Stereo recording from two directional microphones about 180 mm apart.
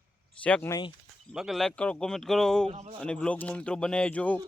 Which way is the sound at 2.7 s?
35° right (ahead or behind).